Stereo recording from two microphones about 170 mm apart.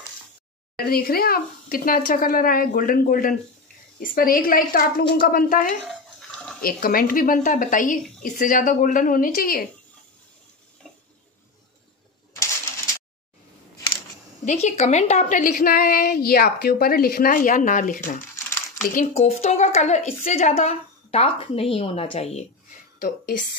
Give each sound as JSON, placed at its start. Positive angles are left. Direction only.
{"t": 0.7, "sound": "a woman's voice", "side_deg": 65}
{"t": 5.9, "sound": "bathtub", "side_deg": 5}
{"t": 6.6, "sound": "a woman's voice", "side_deg": 60}
{"t": 14.4, "sound": "a woman's voice", "side_deg": 40}
{"t": 19.1, "sound": "a woman's voice", "side_deg": 40}
{"t": 22.9, "sound": "a woman's voice", "side_deg": 55}